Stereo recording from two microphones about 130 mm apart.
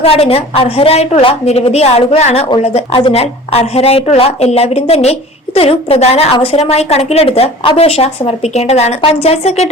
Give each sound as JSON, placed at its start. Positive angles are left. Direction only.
{"t": 0.0, "sound": "a woman's voice", "side_deg": 50}